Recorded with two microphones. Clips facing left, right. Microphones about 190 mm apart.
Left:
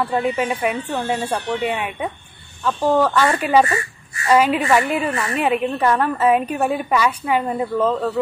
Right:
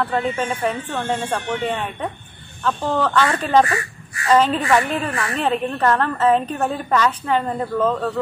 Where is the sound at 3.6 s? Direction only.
25° left (ahead or behind).